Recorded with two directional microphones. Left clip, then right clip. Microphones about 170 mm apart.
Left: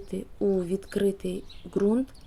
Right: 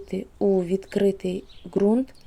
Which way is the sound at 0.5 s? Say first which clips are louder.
Right 5 dB; 20° right (ahead or behind).